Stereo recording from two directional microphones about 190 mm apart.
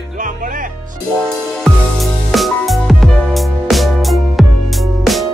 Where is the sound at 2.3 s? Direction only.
Centre (ahead or behind).